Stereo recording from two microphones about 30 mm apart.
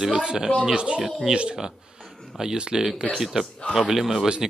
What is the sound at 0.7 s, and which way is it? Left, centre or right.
Speech, right.